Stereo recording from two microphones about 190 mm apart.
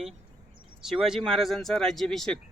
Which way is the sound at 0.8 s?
Centre (ahead or behind).